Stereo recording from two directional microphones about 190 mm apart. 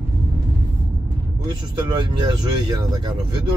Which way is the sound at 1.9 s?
20° right (ahead or behind).